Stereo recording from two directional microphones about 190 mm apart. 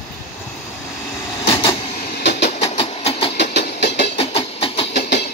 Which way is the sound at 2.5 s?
35° left (ahead or behind).